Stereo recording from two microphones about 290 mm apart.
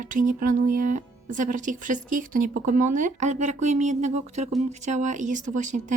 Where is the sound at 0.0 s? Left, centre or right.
Right.